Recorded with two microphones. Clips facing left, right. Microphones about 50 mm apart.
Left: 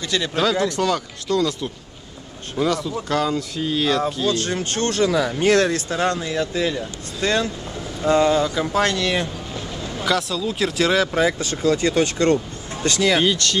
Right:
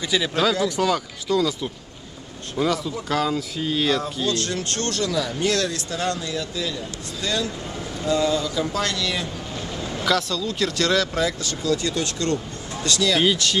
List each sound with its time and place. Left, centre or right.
0.1 s speech: centre
4.3 s speech: left
9.9 s speech: centre; by 13.2 s left
13.2 s speech: centre